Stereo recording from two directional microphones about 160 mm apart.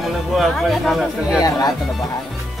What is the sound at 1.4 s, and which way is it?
Speech, 25° left (ahead or behind).